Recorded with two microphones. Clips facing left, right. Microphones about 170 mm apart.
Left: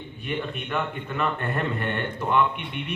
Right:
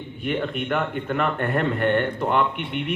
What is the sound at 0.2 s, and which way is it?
A man's voice, 60° right (ahead or behind).